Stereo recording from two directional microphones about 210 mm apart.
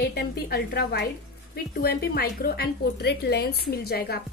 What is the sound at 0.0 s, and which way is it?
A woman's voice, 50° left (ahead or behind).